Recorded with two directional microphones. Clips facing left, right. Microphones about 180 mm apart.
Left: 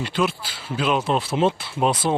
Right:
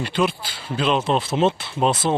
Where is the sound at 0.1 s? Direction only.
5° left (ahead or behind).